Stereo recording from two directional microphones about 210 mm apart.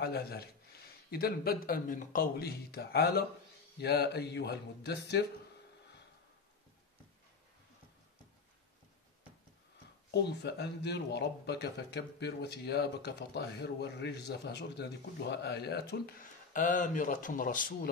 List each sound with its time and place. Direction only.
0.0 s speech: 50° left (ahead or behind)
10.1 s speech: 50° left (ahead or behind)